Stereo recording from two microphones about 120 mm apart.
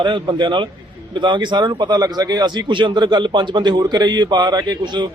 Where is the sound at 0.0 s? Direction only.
40° right (ahead or behind).